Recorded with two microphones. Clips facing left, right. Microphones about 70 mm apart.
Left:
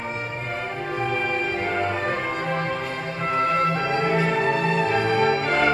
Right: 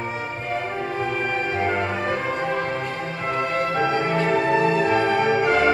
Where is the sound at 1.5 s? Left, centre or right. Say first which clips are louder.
Right 1 dB; centre.